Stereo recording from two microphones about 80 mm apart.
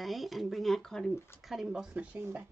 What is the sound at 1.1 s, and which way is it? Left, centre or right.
Speech, left.